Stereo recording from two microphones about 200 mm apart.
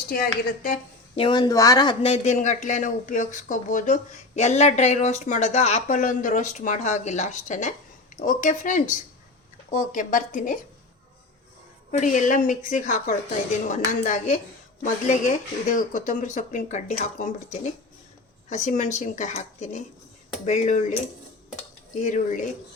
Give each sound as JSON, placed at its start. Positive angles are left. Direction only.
{"t": 0.1, "sound": "a woman's voice", "side_deg": 45}
{"t": 1.1, "sound": "speech", "side_deg": 25}
{"t": 11.9, "sound": "speech", "side_deg": 35}
{"t": 21.9, "sound": "speech", "side_deg": 40}